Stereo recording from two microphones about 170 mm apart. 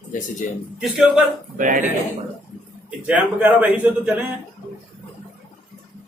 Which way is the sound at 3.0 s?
5° right (ahead or behind).